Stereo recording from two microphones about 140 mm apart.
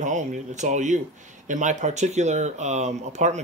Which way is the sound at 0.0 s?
60° right (ahead or behind).